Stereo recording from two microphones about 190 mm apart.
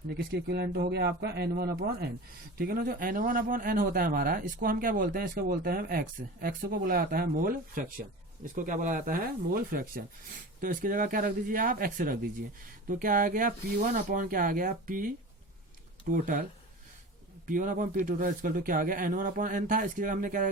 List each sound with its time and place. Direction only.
0.2 s a man's voice: 60° right (ahead or behind)
16.1 s a man's voice: 45° right (ahead or behind)
17.4 s a man's voice: 45° right (ahead or behind)